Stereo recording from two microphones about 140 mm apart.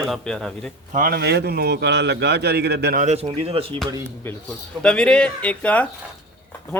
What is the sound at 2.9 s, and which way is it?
Speech, 55° right (ahead or behind).